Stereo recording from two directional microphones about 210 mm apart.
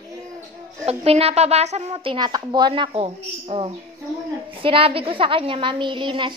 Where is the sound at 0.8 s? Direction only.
30° right (ahead or behind).